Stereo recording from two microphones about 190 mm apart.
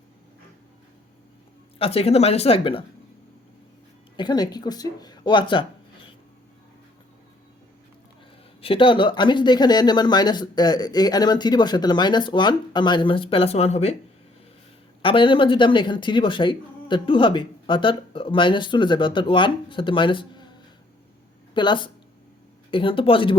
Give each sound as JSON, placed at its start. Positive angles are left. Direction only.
{"t": 1.8, "sound": "speech", "side_deg": 30}
{"t": 4.2, "sound": "speech", "side_deg": 20}
{"t": 8.6, "sound": "speech", "side_deg": 25}
{"t": 15.0, "sound": "speech", "side_deg": 25}